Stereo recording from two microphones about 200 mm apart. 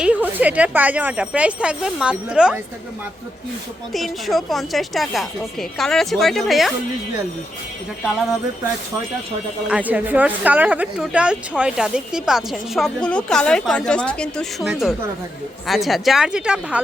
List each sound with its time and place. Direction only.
0.0 s speech: 10° right (ahead or behind)
3.9 s speech: centre (ahead or behind)
9.6 s speech: 5° right (ahead or behind)